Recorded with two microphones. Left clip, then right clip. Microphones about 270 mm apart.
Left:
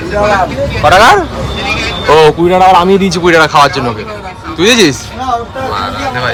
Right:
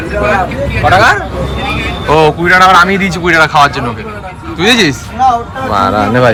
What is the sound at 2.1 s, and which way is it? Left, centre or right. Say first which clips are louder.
A man's voice: left 1 dB; centre.